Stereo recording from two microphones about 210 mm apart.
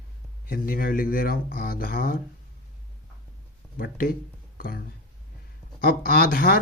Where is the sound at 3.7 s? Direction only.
40° left (ahead or behind).